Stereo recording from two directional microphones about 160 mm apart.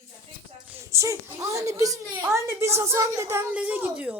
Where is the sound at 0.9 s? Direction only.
20° right (ahead or behind).